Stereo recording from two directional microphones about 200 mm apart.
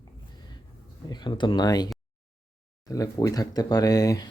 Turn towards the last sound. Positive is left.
turn(degrees=20)  # may be behind; listen again after turning